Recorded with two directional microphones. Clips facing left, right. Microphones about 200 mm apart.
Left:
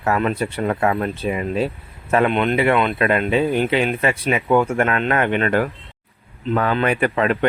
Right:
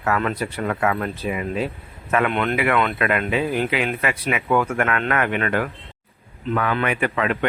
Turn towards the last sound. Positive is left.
turn(degrees=35)  # may be behind; listen again after turning